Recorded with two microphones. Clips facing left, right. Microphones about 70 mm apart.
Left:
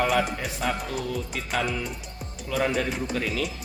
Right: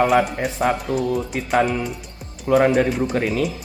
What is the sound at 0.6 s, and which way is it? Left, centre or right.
Speech, right.